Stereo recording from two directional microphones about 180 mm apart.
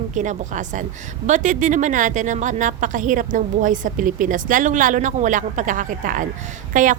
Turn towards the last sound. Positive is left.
turn(degrees=-45)  # may be behind; listen again after turning